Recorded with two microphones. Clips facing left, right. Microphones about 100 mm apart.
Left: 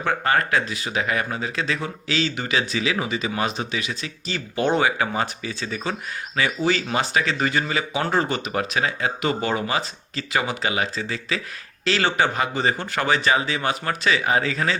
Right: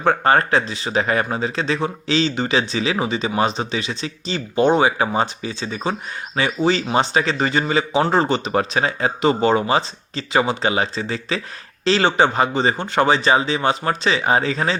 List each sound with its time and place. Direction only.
0.0 s speech: 35° right (ahead or behind)